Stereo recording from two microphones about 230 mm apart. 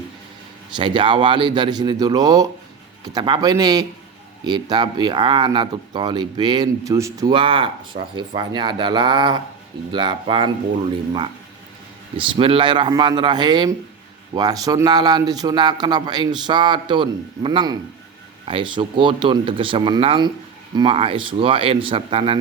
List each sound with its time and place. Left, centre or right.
0.8 s a man's voice: right
12.1 s speech: right